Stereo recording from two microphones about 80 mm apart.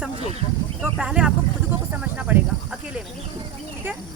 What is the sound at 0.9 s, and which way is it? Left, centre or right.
Speech, centre.